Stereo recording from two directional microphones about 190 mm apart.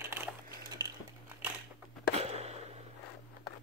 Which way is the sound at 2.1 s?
35° right (ahead or behind).